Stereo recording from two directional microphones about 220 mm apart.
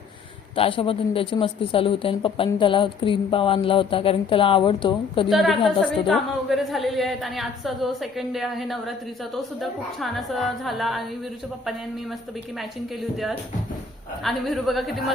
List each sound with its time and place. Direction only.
0.5 s speech: 25° left (ahead or behind)
5.3 s a woman's voice: centre (ahead or behind)
13.0 s a woman's voice: centre (ahead or behind)